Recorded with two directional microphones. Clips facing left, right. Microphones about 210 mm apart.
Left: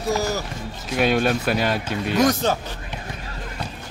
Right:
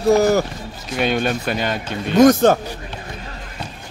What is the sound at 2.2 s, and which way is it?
Speech, 50° right (ahead or behind).